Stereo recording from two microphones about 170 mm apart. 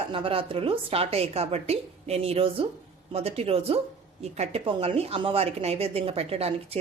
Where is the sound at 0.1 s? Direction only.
30° right (ahead or behind).